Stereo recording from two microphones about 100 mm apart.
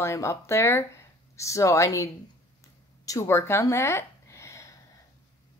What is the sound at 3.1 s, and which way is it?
Speech, 30° left (ahead or behind).